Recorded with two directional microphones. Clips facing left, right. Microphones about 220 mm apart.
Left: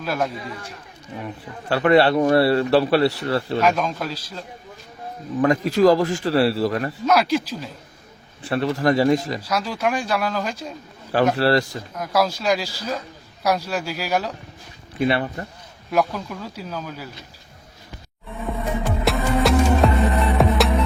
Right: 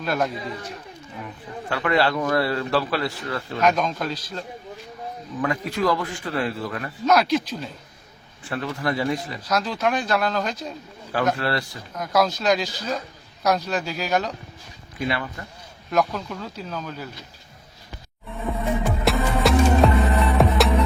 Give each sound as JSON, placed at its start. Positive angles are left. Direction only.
{"t": 0.0, "sound": "a man's voice", "side_deg": 5}
{"t": 1.7, "sound": "speech", "side_deg": 35}
{"t": 3.6, "sound": "speech", "side_deg": 5}
{"t": 5.4, "sound": "speech", "side_deg": 40}
{"t": 7.0, "sound": "speech", "side_deg": 5}
{"t": 8.4, "sound": "speech", "side_deg": 35}
{"t": 9.5, "sound": "speech", "side_deg": 10}
{"t": 11.3, "sound": "speech", "side_deg": 35}
{"t": 11.9, "sound": "speech", "side_deg": 5}
{"t": 15.0, "sound": "speech", "side_deg": 30}
{"t": 15.9, "sound": "speech", "side_deg": 0}
{"t": 18.3, "sound": "music", "side_deg": 0}